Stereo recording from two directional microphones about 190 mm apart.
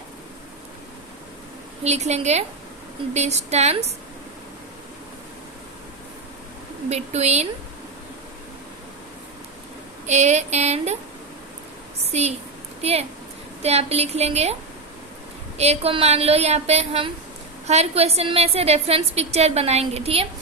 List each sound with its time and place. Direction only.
1.8 s a woman's voice: 35° right (ahead or behind)
6.9 s a woman's voice: 35° right (ahead or behind)
10.1 s a woman's voice: 35° right (ahead or behind)
12.1 s a woman's voice: 35° right (ahead or behind)
15.5 s a woman's voice: 35° right (ahead or behind)